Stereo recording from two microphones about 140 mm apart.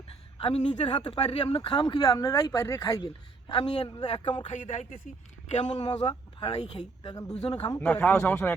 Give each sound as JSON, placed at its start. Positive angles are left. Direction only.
{"t": 0.3, "sound": "speech", "side_deg": 40}
{"t": 3.5, "sound": "speech", "side_deg": 35}
{"t": 4.7, "sound": "speech", "side_deg": 65}
{"t": 7.0, "sound": "speech", "side_deg": 30}
{"t": 7.3, "sound": "speech", "side_deg": 45}
{"t": 7.8, "sound": "speech", "side_deg": 10}